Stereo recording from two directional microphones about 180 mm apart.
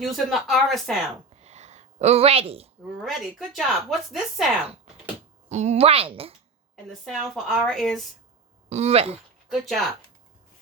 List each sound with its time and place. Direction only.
0.0 s speech: centre (ahead or behind)
1.4 s a sound: 40° right (ahead or behind)
3.0 s speech: centre (ahead or behind)
5.5 s a woman's voice: 40° right (ahead or behind)
7.0 s speech: centre (ahead or behind)
8.7 s a woman's voice: 35° right (ahead or behind)
9.5 s speech: centre (ahead or behind)